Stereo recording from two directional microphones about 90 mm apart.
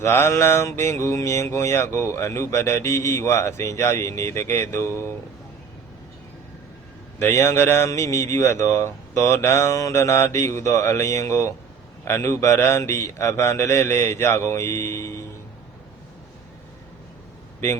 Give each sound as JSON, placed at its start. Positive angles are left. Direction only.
{"t": 0.0, "sound": "mantra", "side_deg": 30}
{"t": 7.2, "sound": "a man's voice", "side_deg": 30}
{"t": 7.9, "sound": "mantra", "side_deg": 35}